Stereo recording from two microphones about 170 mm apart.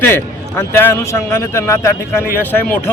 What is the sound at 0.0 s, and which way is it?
A man's voice, 15° left (ahead or behind).